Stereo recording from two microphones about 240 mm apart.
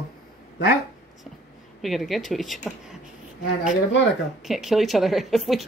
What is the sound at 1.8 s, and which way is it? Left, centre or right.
A woman's voice, centre.